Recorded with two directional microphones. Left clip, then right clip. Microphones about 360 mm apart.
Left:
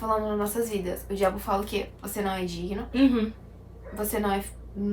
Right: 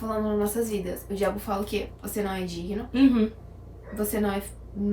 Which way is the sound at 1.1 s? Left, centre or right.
Centre.